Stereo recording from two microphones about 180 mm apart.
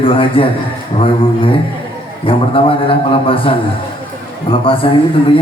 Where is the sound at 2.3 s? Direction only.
30° left (ahead or behind).